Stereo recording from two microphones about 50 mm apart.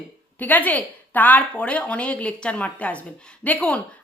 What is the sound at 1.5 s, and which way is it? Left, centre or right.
Speech, left.